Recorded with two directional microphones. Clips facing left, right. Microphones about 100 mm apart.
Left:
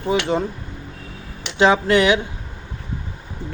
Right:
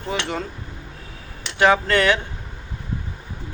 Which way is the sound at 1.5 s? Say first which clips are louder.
Left 2 dB; 20° left (ahead or behind).